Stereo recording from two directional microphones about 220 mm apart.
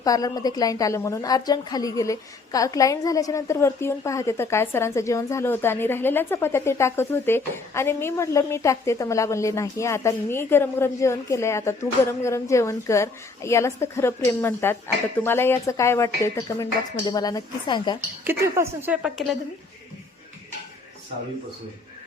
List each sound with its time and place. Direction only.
0.0 s a woman's voice: 15° left (ahead or behind)
18.3 s a woman's voice: 10° right (ahead or behind)